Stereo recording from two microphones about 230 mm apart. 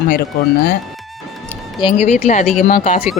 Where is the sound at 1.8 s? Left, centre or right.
Left.